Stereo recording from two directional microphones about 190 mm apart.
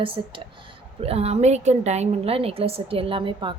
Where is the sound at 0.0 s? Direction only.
25° right (ahead or behind).